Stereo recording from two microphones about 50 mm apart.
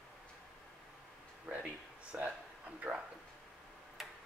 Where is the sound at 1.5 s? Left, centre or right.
Right.